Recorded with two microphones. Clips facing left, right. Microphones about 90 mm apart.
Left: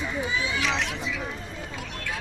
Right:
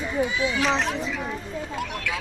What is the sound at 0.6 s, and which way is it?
Speech, 40° right (ahead or behind).